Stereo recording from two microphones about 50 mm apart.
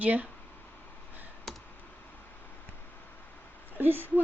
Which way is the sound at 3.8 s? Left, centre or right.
Right.